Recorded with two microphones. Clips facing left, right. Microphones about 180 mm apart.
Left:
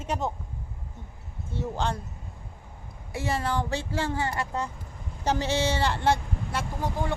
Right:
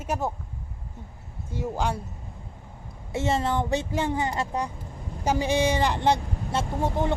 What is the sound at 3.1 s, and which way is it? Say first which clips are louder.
Speech: right 4 dB; 25° right (ahead or behind).